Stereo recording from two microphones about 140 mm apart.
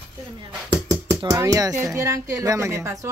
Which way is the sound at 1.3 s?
25° right (ahead or behind).